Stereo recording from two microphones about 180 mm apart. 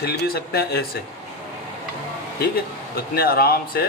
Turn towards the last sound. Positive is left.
turn(degrees=55)  # may be behind; listen again after turning